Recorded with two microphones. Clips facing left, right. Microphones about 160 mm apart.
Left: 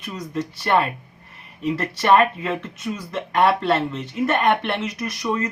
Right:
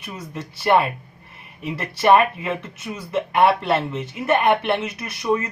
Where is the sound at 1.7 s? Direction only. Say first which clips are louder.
Right 1 dB; 10° right (ahead or behind).